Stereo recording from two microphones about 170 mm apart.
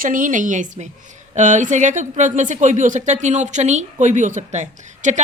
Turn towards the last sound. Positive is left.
turn(degrees=-45)  # may be behind; listen again after turning